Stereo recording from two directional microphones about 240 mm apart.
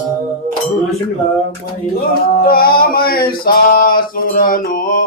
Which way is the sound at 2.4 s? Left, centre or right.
Left.